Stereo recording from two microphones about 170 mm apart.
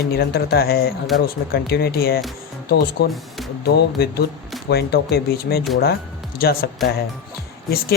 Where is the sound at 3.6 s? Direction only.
65° left (ahead or behind).